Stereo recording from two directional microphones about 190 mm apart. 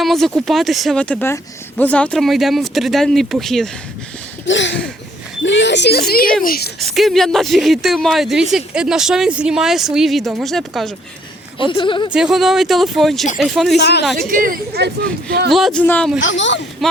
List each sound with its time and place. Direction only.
0.0 s speech: centre (ahead or behind)
4.4 s speech: 70° left (ahead or behind); by 6.7 s 50° left (ahead or behind)
6.7 s speech: centre (ahead or behind)
11.6 s a woman's voice: 25° left (ahead or behind)
12.1 s speech: 5° right (ahead or behind)
13.7 s speech: 60° left (ahead or behind)
14.2 s a woman's voice: 45° right (ahead or behind)
15.4 s speech: centre (ahead or behind)
16.2 s speech: 75° left (ahead or behind)